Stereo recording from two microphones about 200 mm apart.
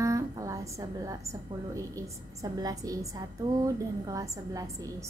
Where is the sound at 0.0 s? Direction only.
15° right (ahead or behind).